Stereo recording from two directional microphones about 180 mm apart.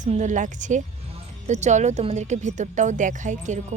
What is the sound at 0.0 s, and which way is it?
Speech, 40° right (ahead or behind).